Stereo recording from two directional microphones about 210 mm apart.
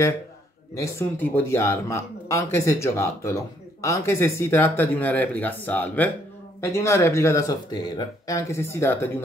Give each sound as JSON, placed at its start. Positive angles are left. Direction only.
{"t": 0.7, "sound": "speech", "side_deg": 10}